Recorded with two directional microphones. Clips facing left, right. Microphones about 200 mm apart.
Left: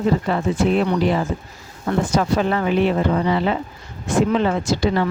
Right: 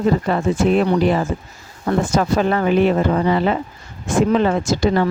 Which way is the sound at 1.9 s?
45° right (ahead or behind).